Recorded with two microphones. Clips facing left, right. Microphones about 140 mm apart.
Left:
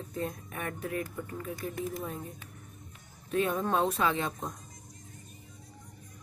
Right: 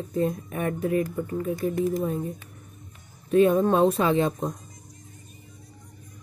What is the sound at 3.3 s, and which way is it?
A woman's voice, 25° right (ahead or behind).